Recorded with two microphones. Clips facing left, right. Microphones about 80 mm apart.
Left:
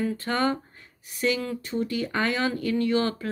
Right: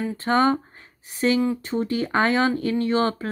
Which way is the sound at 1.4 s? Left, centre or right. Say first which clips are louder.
Right 8 dB; centre.